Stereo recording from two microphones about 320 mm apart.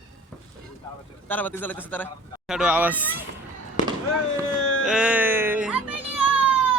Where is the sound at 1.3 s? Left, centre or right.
Centre.